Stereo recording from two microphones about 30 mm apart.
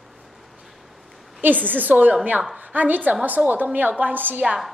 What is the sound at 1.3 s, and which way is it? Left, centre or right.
A woman's voice, right.